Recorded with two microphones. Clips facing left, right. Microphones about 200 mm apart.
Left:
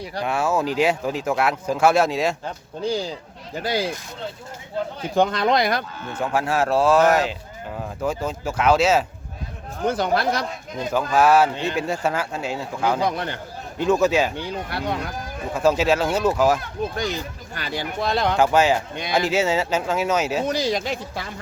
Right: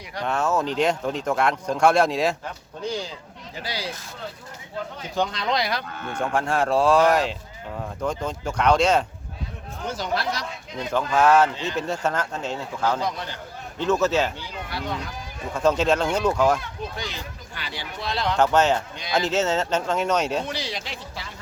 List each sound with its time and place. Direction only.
0.2 s speech: 10° left (ahead or behind)
2.8 s speech: 35° left (ahead or behind)
3.5 s speech: 50° left (ahead or behind)
5.1 s speech: 55° left (ahead or behind)
6.2 s speech: 5° left (ahead or behind)
9.8 s speech: 55° left (ahead or behind)
10.9 s speech: 10° left (ahead or behind)
13.0 s speech: 60° left (ahead or behind)
13.7 s speech: 10° left (ahead or behind)
14.3 s speech: 60° left (ahead or behind)
15.5 s speech: 5° left (ahead or behind)
16.6 s speech: 45° left (ahead or behind)
18.3 s speech: 10° left (ahead or behind)
20.4 s speech: 45° left (ahead or behind)